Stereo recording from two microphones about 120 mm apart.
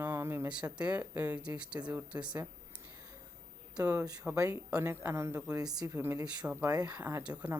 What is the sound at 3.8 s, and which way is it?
Speech, 30° right (ahead or behind).